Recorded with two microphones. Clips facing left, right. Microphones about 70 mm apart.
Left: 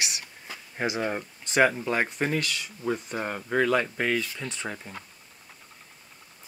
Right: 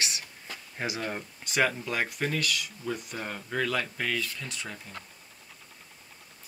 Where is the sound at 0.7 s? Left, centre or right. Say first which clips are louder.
Left 5 dB; left.